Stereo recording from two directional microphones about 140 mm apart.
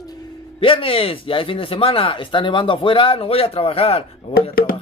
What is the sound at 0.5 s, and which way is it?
Speech, 40° left (ahead or behind).